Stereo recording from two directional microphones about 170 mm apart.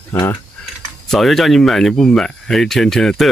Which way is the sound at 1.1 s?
Centre (ahead or behind).